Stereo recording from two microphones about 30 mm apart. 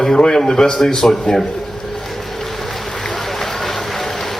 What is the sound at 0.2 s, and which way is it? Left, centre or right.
A man's voice, left.